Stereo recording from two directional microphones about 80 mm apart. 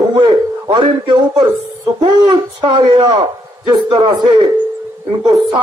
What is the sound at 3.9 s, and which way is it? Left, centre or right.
A man's voice, right.